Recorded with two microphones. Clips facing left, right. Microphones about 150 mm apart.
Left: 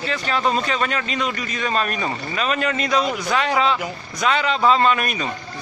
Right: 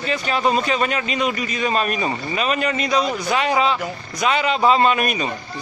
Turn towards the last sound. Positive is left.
turn(degrees=-15)  # may be behind; listen again after turning